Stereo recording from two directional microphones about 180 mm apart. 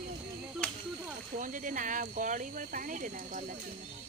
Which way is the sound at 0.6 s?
5° left (ahead or behind).